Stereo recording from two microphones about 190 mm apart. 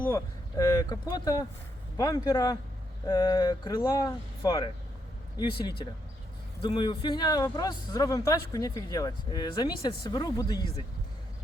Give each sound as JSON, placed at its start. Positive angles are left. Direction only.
{"t": 0.1, "sound": "speech", "side_deg": 15}